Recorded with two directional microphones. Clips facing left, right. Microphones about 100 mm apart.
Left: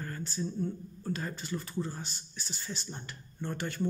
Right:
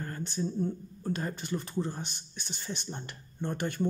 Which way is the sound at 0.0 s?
30° right (ahead or behind).